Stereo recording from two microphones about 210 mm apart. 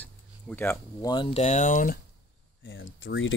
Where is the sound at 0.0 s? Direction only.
10° left (ahead or behind).